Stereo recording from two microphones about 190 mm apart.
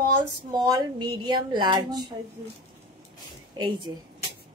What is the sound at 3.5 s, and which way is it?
Speech, 25° right (ahead or behind).